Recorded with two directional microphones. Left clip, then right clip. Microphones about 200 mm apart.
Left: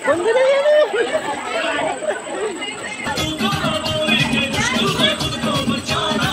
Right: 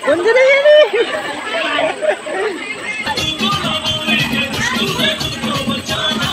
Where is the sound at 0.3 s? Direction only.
45° right (ahead or behind).